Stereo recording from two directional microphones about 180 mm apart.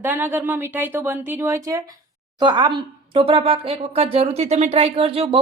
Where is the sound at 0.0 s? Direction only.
10° right (ahead or behind).